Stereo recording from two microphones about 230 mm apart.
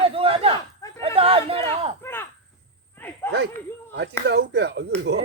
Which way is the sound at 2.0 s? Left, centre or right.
Centre.